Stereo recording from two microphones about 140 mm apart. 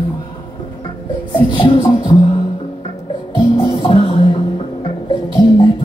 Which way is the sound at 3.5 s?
40° left (ahead or behind).